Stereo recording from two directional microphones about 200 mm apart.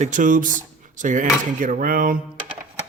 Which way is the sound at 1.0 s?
40° right (ahead or behind).